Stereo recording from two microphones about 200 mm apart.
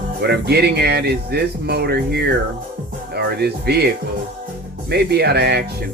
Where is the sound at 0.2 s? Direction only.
55° right (ahead or behind).